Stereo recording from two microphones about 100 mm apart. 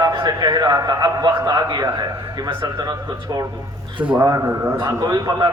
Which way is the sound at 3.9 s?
10° right (ahead or behind).